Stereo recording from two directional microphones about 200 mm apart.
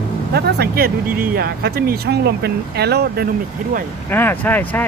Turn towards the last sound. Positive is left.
turn(degrees=10)  # may be behind; listen again after turning